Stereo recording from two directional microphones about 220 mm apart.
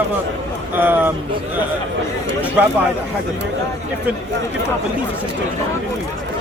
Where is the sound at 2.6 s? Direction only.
5° right (ahead or behind).